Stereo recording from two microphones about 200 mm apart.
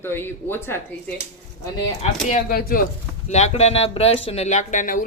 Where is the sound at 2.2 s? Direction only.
45° left (ahead or behind).